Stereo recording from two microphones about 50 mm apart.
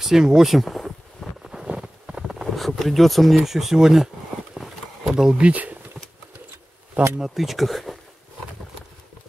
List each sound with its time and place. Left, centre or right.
0.0 s speech: centre
1.4 s a sound: centre
2.4 s speech: centre
4.6 s a sound: centre
5.4 s speech: right
7.2 s speech: centre